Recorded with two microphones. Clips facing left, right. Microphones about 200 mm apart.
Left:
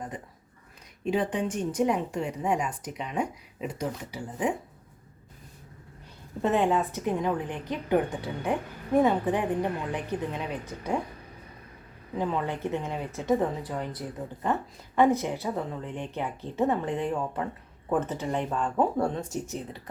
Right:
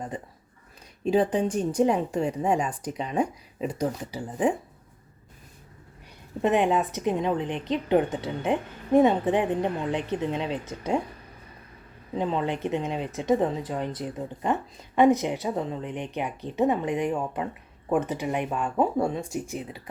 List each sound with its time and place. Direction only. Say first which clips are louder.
1.0 s a woman's voice: right 5 dB; 35° right (ahead or behind)
6.4 s a woman's voice: right 2 dB; 20° right (ahead or behind)
12.1 s speech: right 2 dB; 25° right (ahead or behind); by 19.8 s 10° right (ahead or behind)